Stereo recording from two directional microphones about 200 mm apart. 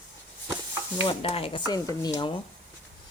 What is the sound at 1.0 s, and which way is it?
A woman's voice, 30° left (ahead or behind).